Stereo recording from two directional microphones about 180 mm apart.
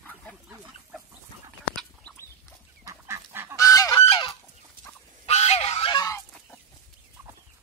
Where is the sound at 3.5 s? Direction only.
20° left (ahead or behind).